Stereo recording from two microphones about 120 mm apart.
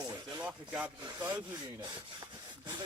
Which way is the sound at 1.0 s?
40° right (ahead or behind).